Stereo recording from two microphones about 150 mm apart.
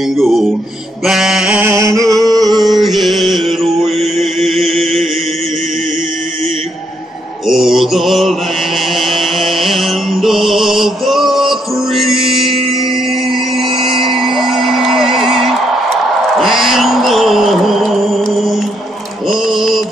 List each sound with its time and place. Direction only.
0.2 s mantra: centre (ahead or behind)
1.7 s a sound: 20° right (ahead or behind)
2.6 s music: centre (ahead or behind)
3.8 s mantra: centre (ahead or behind)
7.4 s mantra: centre (ahead or behind)
13.3 s a sound: centre (ahead or behind)
16.3 s mantra: centre (ahead or behind)